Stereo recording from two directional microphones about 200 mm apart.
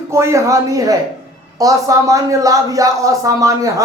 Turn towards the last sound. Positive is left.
turn(degrees=-15)  # may be behind; listen again after turning